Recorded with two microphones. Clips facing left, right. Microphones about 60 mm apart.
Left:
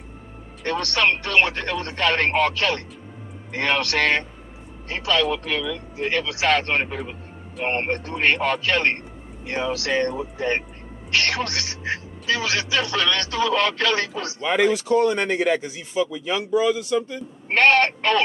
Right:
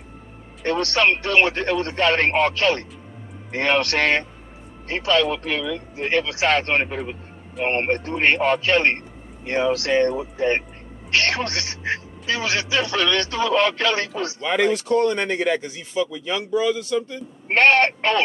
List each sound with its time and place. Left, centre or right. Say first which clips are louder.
0.6 s a man's voice: right 2 dB; right
6.8 s a man's voice: right 2 dB; centre
7.6 s a man's voice: right 3 dB; centre
14.4 s speech: left 1 dB; centre
17.5 s speech: right 1 dB; right